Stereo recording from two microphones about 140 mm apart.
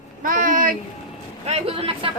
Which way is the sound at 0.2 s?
75° right (ahead or behind).